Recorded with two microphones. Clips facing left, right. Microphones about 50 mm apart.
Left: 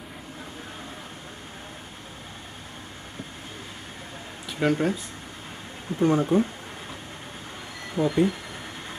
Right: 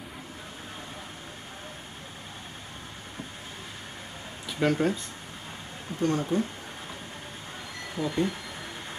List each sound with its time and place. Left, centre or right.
4.5 s speech: centre
5.9 s speech: centre
7.9 s speech: centre